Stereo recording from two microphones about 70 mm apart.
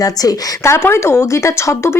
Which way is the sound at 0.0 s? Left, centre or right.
Left.